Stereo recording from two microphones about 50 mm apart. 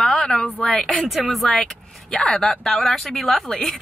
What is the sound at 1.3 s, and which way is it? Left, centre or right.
A woman's voice, centre.